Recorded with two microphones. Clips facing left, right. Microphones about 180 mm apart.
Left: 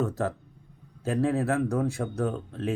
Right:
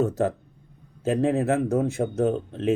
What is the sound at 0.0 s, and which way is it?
Speech, 20° right (ahead or behind).